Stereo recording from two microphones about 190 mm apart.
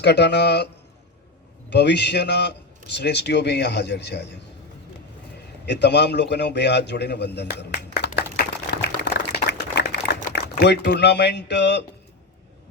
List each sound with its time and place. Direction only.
0.0 s a man's voice: 60° left (ahead or behind)
1.7 s a man's voice: 65° left (ahead or behind)
5.6 s a man's voice: 60° left (ahead or behind)
7.8 s a sound: 60° left (ahead or behind)
10.3 s speech: 60° left (ahead or behind)